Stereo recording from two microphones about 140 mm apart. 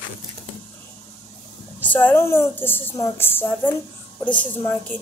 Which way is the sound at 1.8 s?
10° left (ahead or behind).